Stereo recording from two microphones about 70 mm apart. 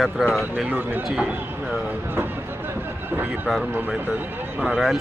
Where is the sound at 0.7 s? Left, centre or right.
Right.